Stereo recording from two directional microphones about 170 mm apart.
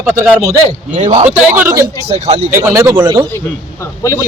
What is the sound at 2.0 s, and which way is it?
Speech, 40° right (ahead or behind).